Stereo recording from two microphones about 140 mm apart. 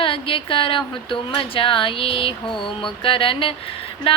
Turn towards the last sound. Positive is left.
turn(degrees=40)  # may be behind; listen again after turning